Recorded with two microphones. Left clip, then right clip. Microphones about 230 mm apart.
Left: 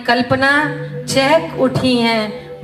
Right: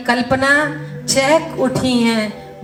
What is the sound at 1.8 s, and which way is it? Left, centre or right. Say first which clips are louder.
Speech: left 2 dB; left.